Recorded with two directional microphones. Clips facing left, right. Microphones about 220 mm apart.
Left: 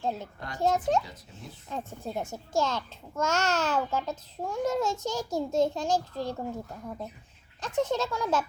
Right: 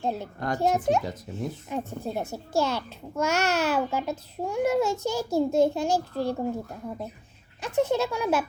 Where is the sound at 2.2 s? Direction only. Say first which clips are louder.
Right 4 dB; 35° right (ahead or behind).